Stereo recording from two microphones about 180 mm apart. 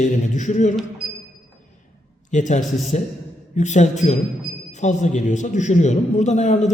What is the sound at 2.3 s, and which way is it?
A man's voice, 45° left (ahead or behind).